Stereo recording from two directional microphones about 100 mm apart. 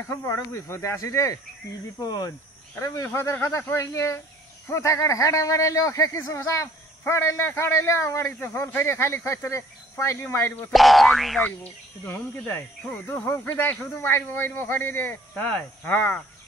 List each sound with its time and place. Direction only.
0.0 s speech: 25° left (ahead or behind)
2.7 s speech: 30° left (ahead or behind)
10.7 s speech: centre (ahead or behind)
11.4 s speech: 15° left (ahead or behind)